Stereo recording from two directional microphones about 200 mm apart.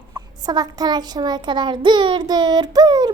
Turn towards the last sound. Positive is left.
turn(degrees=-20)  # may be behind; listen again after turning